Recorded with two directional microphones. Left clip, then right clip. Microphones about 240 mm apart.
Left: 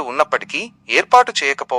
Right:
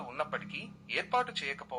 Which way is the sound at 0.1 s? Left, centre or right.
Left.